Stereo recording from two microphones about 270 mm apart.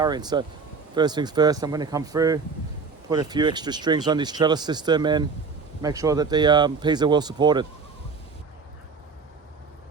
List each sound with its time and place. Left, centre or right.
0.0 s speech: centre